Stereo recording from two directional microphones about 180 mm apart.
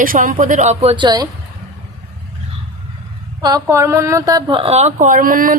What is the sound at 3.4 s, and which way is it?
A woman's voice, 20° right (ahead or behind).